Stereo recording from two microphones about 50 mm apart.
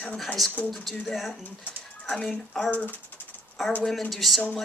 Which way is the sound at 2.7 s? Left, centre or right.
Left.